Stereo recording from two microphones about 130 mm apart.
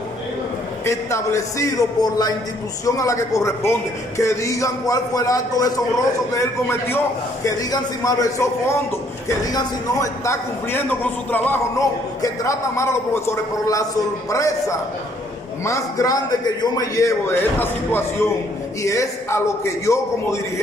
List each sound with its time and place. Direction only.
0.8 s a man's voice: 25° left (ahead or behind)